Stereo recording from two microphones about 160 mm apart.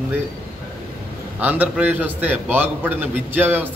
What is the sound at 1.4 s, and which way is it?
A man's voice, 10° right (ahead or behind).